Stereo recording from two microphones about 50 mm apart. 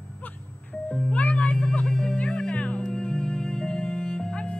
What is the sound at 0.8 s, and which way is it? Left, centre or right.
Music, centre.